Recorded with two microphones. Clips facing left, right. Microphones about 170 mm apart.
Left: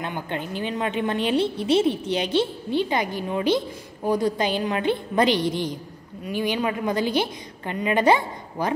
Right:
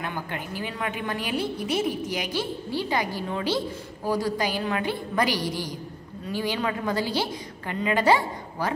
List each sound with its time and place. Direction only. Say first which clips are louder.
0.0 s a woman's voice: left 3 dB; 25° left (ahead or behind)